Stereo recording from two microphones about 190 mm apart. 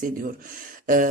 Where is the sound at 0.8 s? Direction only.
45° right (ahead or behind).